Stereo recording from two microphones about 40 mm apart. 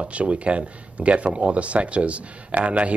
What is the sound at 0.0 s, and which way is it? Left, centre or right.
Speech, right.